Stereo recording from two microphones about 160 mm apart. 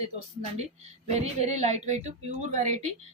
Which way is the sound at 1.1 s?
45° right (ahead or behind).